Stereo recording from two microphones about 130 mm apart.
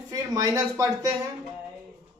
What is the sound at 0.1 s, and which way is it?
Speech, 30° right (ahead or behind).